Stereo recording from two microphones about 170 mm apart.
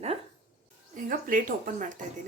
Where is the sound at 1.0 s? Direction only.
55° right (ahead or behind).